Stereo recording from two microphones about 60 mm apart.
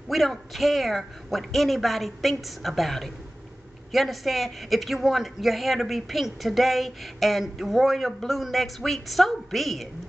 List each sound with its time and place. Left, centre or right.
0.1 s a man's voice: centre